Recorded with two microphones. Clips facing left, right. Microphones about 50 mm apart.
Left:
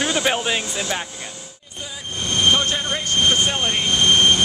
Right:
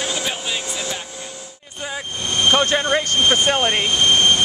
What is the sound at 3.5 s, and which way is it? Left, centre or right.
Speech, right.